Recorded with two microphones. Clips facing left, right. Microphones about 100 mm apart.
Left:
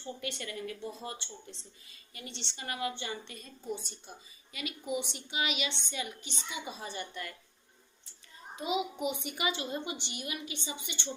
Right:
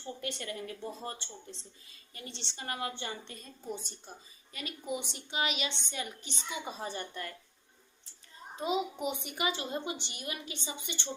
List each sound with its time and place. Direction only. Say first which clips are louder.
0.2 s a woman's voice: even; 40° right (ahead or behind)
4.5 s a woman's voice: left 2 dB; 35° right (ahead or behind)
9.0 s a woman's voice: even; 35° right (ahead or behind)